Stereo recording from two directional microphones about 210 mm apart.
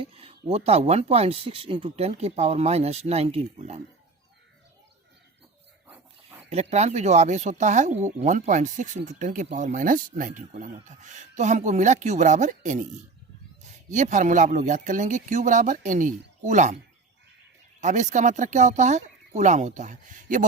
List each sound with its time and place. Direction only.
0.0 s speech: 25° right (ahead or behind)
6.5 s speech: 30° right (ahead or behind)
13.9 s speech: 35° right (ahead or behind)
17.7 s speech: 35° right (ahead or behind)